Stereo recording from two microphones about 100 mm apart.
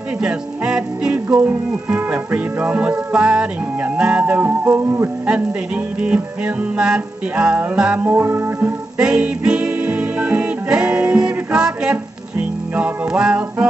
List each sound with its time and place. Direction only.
0.2 s music: 10° right (ahead or behind)
5.9 s music: 10° right (ahead or behind)
8.9 s music: 10° right (ahead or behind)